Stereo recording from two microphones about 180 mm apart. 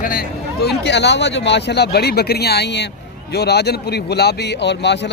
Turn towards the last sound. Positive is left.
turn(degrees=75)  # may be behind; listen again after turning